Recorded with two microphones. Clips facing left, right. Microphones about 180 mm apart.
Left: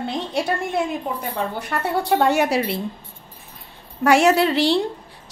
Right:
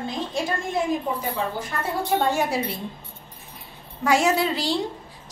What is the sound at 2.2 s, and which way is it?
Speech, 75° left (ahead or behind).